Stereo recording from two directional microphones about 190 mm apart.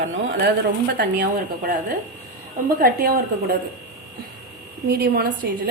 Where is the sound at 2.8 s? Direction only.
50° right (ahead or behind).